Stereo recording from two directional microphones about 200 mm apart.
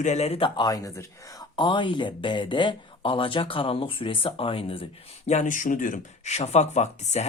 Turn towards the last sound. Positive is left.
turn(degrees=35)  # may be behind; listen again after turning